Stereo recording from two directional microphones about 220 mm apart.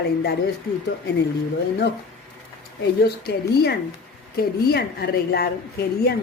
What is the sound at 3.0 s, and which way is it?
Speech, 45° left (ahead or behind).